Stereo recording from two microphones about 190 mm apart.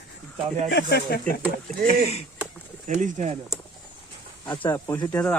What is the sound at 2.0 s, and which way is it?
Speech, 35° left (ahead or behind).